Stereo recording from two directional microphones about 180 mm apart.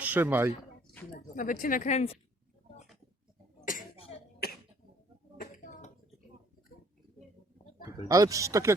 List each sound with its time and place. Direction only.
0.0 s speech: 10° right (ahead or behind)
1.4 s speech: 50° left (ahead or behind)
4.4 s cough: 60° left (ahead or behind)
7.9 s speech: 20° right (ahead or behind)